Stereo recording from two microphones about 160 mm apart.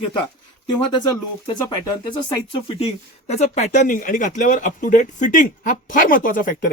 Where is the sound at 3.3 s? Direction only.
45° left (ahead or behind).